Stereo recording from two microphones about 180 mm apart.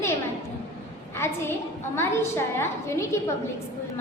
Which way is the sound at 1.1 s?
15° left (ahead or behind).